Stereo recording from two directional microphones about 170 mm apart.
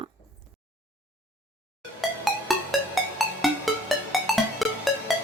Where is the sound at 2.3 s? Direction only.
Centre (ahead or behind).